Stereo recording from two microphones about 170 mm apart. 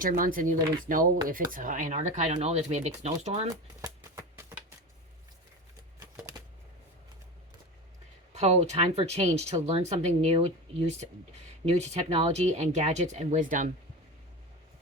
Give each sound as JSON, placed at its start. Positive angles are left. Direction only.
{"t": 0.0, "sound": "speech", "side_deg": -55}
{"t": 3.5, "sound": "shuffling cards", "side_deg": -20}
{"t": 6.0, "sound": "typewriter", "side_deg": -20}
{"t": 8.3, "sound": "speech", "side_deg": -40}